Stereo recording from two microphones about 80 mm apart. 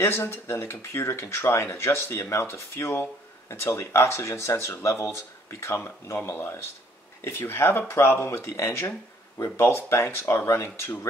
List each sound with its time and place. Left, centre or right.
0.0 s speech: left